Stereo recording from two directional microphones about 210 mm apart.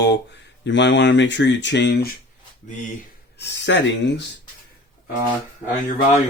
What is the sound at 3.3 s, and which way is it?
Speech, 55° left (ahead or behind).